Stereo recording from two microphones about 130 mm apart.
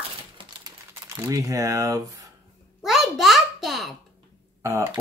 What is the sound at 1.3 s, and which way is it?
Speech, 25° right (ahead or behind).